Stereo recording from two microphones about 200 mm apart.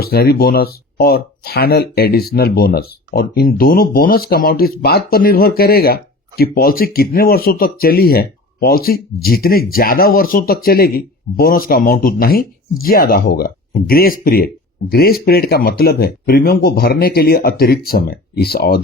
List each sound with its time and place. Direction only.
0.0 s speech: 50° left (ahead or behind)